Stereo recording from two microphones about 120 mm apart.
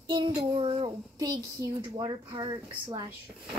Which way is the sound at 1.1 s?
35° right (ahead or behind).